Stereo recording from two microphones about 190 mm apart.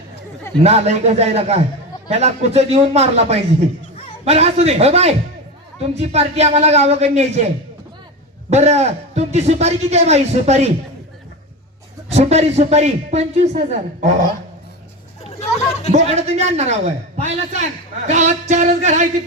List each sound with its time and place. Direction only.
0.6 s a man's voice: 35° right (ahead or behind)
12.0 s a man's voice: 35° right (ahead or behind)
15.3 s a sound: 35° left (ahead or behind)
15.9 s a man's voice: 35° right (ahead or behind)